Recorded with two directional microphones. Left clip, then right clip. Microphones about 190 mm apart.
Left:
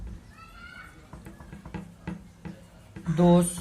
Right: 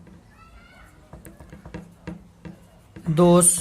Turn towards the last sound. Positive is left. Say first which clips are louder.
# right 6 dB
turn(degrees=-55)  # may be behind; listen again after turning